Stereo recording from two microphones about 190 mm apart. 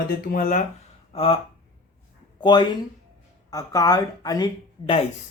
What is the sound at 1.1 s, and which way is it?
Speech, 30° left (ahead or behind).